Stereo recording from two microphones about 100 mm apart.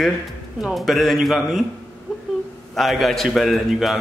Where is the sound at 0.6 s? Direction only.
Centre (ahead or behind).